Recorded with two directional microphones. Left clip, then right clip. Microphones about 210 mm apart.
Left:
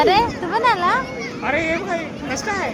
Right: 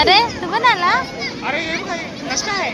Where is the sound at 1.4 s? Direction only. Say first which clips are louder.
Left 2 dB; 45° left (ahead or behind).